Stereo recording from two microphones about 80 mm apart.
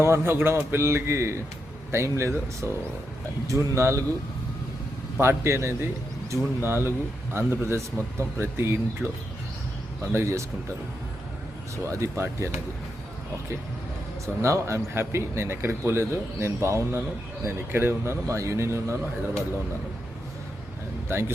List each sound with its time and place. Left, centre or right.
0.0 s a man's voice: right
5.1 s a man's voice: right
11.9 s a man's voice: right
14.4 s a man's voice: right
21.1 s a man's voice: right